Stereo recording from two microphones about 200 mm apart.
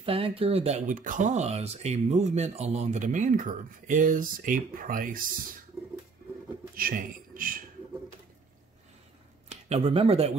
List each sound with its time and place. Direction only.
0.0 s speech: 25° right (ahead or behind); by 5.2 s 45° right (ahead or behind)
6.7 s a man's voice: 45° right (ahead or behind)
9.5 s speech: 30° right (ahead or behind)